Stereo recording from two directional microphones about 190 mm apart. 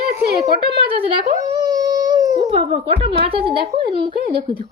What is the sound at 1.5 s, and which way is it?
Dog, 20° right (ahead or behind).